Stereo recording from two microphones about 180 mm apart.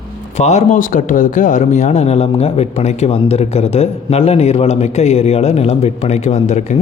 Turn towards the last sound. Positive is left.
turn(degrees=40)  # may be behind; listen again after turning